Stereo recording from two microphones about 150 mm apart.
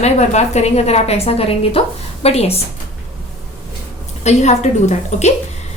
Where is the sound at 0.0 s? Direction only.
45° left (ahead or behind).